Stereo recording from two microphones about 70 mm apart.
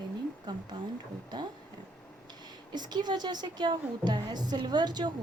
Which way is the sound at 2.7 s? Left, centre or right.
Right.